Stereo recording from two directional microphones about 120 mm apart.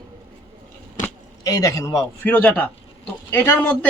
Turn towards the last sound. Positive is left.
turn(degrees=15)  # may be behind; listen again after turning